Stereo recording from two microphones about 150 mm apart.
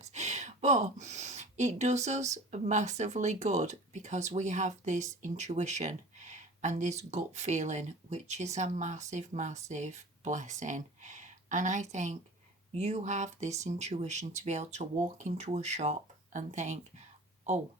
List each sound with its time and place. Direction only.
0.0 s speech: 50° right (ahead or behind)